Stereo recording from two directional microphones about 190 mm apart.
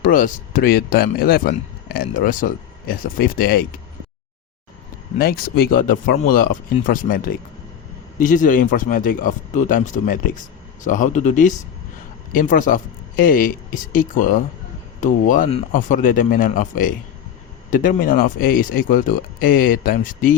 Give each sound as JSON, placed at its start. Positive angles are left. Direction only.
{"t": 0.0, "sound": "speech", "side_deg": 45}
{"t": 5.1, "sound": "speech", "side_deg": 50}